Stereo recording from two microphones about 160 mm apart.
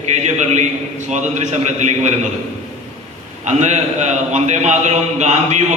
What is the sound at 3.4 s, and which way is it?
A man's voice, 45° right (ahead or behind).